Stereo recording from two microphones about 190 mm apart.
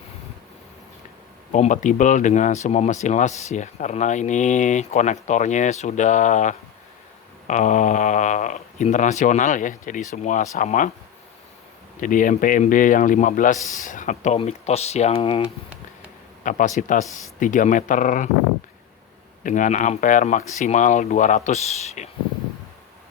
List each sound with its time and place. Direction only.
1.5 s speech: 40° left (ahead or behind)
11.9 s a man's voice: 45° left (ahead or behind); by 15.4 s 30° left (ahead or behind)
16.4 s a man's voice: 40° left (ahead or behind)
19.4 s speech: 40° left (ahead or behind)